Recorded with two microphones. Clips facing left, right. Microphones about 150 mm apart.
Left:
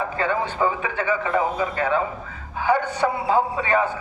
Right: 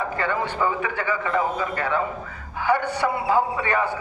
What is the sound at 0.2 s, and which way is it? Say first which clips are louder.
A man's voice: left 3 dB; 20° left (ahead or behind).